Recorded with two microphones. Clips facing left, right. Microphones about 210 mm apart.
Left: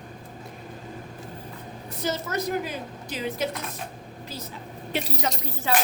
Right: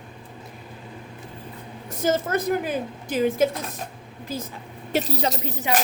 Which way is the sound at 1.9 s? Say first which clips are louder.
Right 6 dB; 50° right (ahead or behind).